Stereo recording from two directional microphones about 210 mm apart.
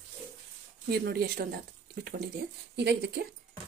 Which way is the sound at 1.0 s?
45° right (ahead or behind).